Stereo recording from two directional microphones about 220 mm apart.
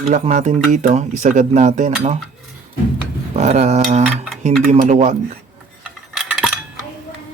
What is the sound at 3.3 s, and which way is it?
Speech, 30° right (ahead or behind).